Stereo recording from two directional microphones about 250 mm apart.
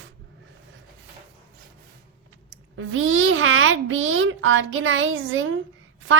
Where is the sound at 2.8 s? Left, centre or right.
Right.